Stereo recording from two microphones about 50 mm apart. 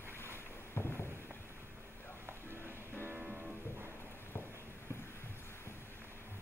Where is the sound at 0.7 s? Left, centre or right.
Left.